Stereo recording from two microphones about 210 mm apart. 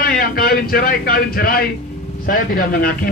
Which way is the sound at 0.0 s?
45° left (ahead or behind).